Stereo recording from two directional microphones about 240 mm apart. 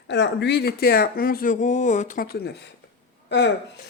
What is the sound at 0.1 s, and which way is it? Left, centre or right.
Speech, left.